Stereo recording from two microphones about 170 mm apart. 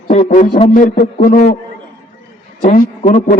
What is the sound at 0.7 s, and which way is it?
Speech, 50° left (ahead or behind).